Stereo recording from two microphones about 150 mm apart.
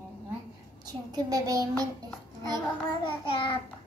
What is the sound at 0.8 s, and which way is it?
A child's voice, 25° right (ahead or behind).